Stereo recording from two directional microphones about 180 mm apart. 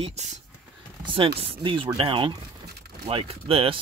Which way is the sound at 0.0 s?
40° right (ahead or behind).